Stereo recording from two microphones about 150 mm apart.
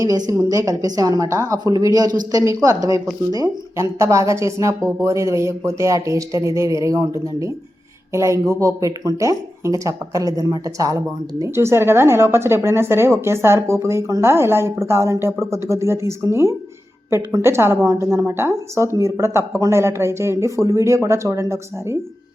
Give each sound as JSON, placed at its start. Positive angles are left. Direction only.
{"t": 0.0, "sound": "a woman's voice", "side_deg": -25}